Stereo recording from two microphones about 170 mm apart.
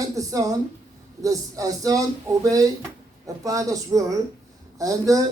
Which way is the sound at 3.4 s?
20° right (ahead or behind).